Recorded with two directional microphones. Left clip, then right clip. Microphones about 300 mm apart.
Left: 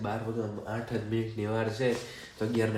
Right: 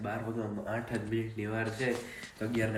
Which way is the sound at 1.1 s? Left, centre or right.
Centre.